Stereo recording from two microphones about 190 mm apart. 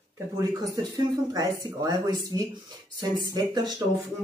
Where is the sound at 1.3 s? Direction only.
20° right (ahead or behind).